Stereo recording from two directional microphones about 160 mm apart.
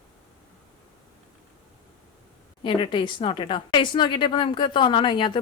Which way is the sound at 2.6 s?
30° left (ahead or behind).